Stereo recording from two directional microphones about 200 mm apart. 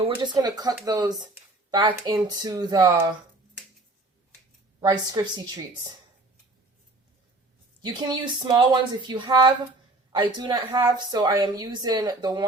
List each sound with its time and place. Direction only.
0.2 s a woman's voice: 20° right (ahead or behind)
4.8 s a woman's voice: 20° right (ahead or behind)
7.8 s a woman's voice: 20° right (ahead or behind)